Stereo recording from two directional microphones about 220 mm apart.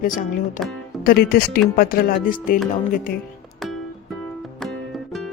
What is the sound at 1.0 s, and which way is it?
Speech, 45° left (ahead or behind).